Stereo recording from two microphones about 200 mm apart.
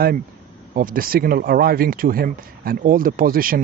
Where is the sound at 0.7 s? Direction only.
45° right (ahead or behind).